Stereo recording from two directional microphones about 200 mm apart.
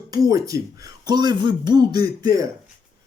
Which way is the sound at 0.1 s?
20° right (ahead or behind).